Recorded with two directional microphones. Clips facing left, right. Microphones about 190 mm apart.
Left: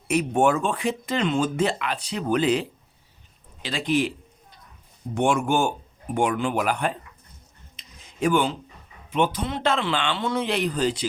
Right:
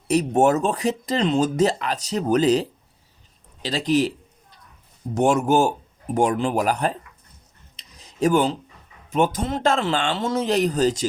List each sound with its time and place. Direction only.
0.1 s speech: 40° right (ahead or behind)
5.1 s speech: 40° right (ahead or behind)
7.8 s a sound: 35° right (ahead or behind)
9.0 s speech: 45° right (ahead or behind)